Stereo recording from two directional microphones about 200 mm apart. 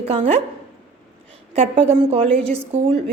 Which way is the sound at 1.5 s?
30° right (ahead or behind).